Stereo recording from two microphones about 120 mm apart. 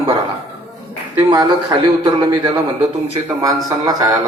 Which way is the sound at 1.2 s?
35° right (ahead or behind).